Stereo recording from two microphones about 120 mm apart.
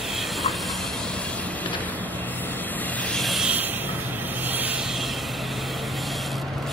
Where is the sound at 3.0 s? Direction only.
Centre (ahead or behind).